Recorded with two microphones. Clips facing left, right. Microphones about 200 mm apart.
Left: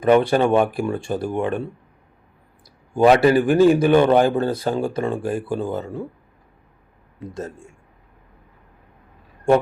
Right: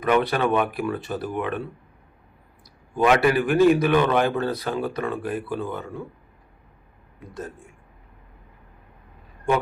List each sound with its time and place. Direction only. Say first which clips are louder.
0.0 s speech: left 5 dB; 30° left (ahead or behind)
2.9 s speech: left 5 dB; 35° left (ahead or behind)
7.2 s speech: left 5 dB; 25° left (ahead or behind)
9.5 s speech: left 6 dB; 30° left (ahead or behind)